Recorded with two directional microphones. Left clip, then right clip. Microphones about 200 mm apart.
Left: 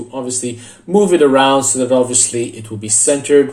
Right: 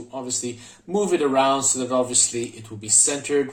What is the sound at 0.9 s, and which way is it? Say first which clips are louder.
Speech: left 10 dB; 10° right (ahead or behind).